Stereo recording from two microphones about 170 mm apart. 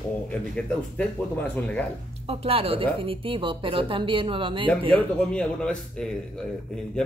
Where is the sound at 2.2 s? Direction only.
35° right (ahead or behind).